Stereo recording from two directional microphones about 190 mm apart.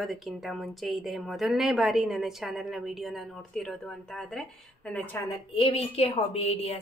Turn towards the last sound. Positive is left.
turn(degrees=35)  # may be behind; listen again after turning